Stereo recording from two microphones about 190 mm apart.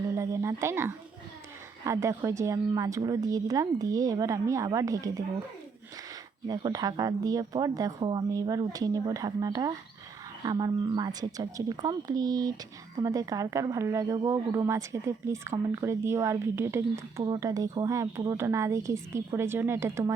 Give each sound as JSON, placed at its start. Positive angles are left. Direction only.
{"t": 0.1, "sound": "speech", "side_deg": -15}
{"t": 6.5, "sound": "speech", "side_deg": -20}